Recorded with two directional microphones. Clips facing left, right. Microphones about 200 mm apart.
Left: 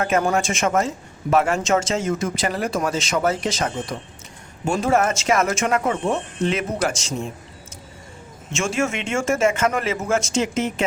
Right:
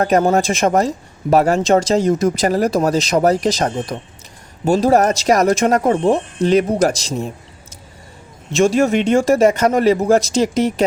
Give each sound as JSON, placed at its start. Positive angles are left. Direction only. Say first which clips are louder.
{"t": 0.0, "sound": "speech", "louder": "right 6 dB", "side_deg": -35}
{"t": 8.5, "sound": "speech", "louder": "right 9 dB", "side_deg": -35}